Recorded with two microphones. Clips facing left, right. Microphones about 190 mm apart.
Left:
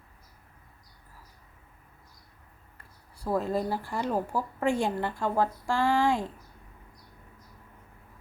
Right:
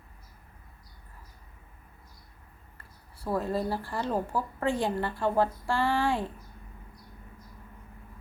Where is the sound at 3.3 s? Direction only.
15° left (ahead or behind).